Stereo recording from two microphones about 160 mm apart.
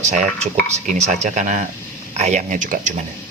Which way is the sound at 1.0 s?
50° right (ahead or behind).